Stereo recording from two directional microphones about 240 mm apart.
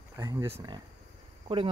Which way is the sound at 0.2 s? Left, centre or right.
Centre.